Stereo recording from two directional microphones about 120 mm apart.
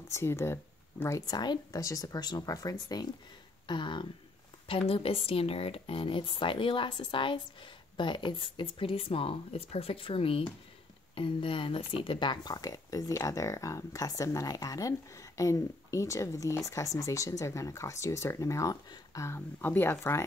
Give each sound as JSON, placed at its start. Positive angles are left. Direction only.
{"t": 0.1, "sound": "speech", "side_deg": 20}
{"t": 3.6, "sound": "a sound", "side_deg": 40}
{"t": 4.6, "sound": "speech", "side_deg": 50}